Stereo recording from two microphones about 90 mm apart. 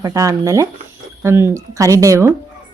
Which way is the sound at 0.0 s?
35° right (ahead or behind).